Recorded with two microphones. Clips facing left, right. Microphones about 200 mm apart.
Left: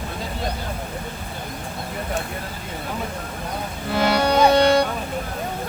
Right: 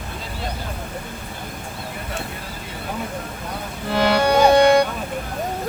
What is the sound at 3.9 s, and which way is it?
Music, 55° right (ahead or behind).